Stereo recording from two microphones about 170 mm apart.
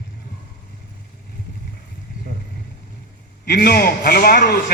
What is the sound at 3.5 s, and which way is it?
A man's voice, 65° left (ahead or behind).